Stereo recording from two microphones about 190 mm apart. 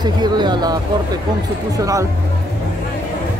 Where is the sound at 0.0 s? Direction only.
20° right (ahead or behind).